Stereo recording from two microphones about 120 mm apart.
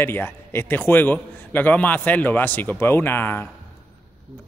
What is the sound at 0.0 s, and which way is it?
A man's voice, 20° left (ahead or behind).